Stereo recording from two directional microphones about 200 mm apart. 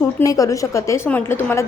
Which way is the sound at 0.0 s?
15° left (ahead or behind).